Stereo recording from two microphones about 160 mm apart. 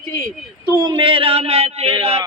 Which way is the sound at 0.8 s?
30° right (ahead or behind).